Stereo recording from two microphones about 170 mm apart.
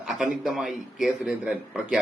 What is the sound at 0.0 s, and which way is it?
A man's voice, centre (ahead or behind).